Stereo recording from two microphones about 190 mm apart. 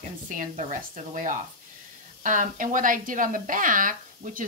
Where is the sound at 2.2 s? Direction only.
45° right (ahead or behind).